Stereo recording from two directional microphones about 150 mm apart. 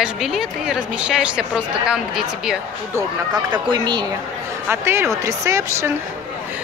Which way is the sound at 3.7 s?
30° right (ahead or behind).